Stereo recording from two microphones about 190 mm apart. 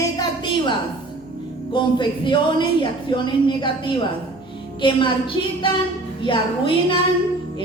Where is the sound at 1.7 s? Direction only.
25° left (ahead or behind).